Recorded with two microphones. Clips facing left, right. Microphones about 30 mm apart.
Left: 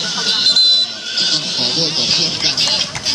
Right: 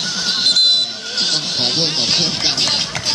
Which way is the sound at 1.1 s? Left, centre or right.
Centre.